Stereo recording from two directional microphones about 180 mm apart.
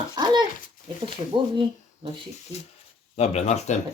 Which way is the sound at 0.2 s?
25° right (ahead or behind).